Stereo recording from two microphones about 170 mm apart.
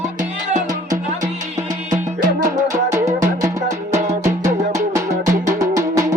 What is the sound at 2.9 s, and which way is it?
Music, 20° right (ahead or behind).